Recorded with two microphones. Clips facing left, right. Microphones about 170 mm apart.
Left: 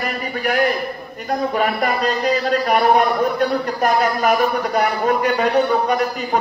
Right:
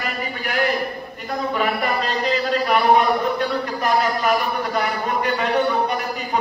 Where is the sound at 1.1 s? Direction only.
45° left (ahead or behind).